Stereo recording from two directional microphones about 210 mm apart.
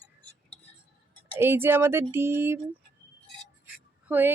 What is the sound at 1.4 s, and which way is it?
Speech, 10° right (ahead or behind).